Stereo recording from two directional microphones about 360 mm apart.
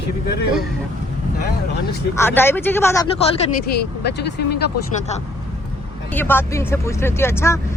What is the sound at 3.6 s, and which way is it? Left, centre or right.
Speech, left.